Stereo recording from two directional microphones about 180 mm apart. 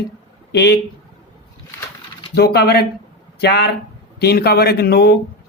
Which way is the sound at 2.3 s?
60° left (ahead or behind).